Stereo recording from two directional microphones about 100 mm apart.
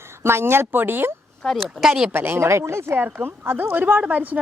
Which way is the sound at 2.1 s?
20° right (ahead or behind).